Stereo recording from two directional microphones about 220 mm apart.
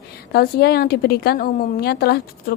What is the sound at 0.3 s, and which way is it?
A woman's voice, 45° left (ahead or behind).